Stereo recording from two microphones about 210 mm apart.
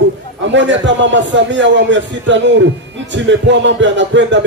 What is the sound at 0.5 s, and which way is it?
A man's voice, 60° right (ahead or behind).